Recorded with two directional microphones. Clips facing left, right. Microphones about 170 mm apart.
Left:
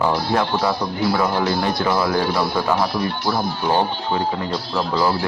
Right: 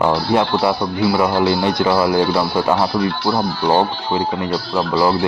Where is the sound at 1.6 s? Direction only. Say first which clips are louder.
Right 4 dB; 20° right (ahead or behind).